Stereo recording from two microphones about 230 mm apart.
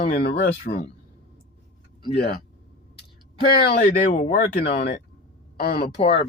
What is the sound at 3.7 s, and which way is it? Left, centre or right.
A woman's voice, left.